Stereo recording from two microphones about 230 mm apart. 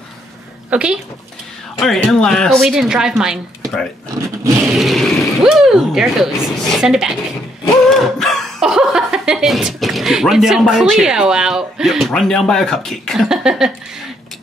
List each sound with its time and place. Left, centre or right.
0.7 s speech: centre
4.6 s speech: centre